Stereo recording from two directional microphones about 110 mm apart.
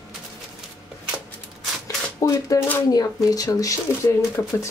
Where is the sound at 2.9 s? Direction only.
35° left (ahead or behind).